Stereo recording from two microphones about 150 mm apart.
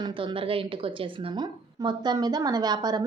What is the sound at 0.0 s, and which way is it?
A woman's voice, 35° right (ahead or behind).